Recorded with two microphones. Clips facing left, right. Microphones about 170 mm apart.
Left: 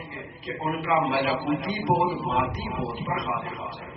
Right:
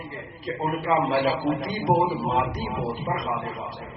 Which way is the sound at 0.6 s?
35° right (ahead or behind).